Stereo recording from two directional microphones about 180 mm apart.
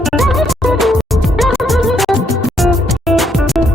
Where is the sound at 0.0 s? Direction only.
Centre (ahead or behind).